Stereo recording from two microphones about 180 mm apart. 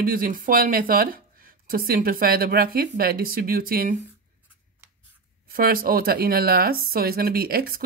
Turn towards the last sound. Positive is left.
turn(degrees=-55)  # may be behind; listen again after turning